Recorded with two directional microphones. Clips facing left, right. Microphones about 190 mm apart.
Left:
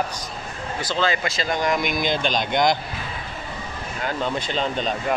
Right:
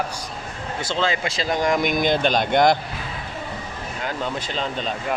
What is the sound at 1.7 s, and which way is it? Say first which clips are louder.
Speech: right 5 dB; 45° right (ahead or behind).